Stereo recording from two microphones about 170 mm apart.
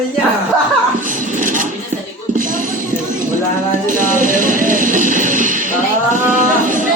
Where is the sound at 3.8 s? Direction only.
50° right (ahead or behind).